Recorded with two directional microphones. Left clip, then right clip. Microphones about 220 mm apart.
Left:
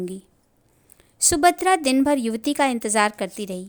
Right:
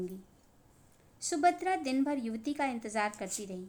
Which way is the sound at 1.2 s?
45° left (ahead or behind).